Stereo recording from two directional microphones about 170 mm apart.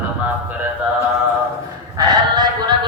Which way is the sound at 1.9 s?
25° right (ahead or behind).